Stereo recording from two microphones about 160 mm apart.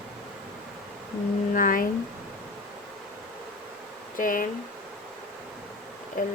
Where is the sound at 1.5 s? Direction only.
60° left (ahead or behind).